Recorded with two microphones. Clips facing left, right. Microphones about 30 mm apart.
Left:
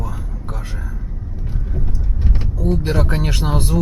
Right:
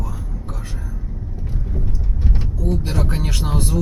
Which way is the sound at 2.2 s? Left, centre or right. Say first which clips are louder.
Left 2 dB; centre.